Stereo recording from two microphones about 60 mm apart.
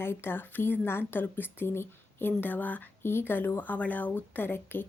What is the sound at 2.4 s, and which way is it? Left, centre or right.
A woman's voice, left.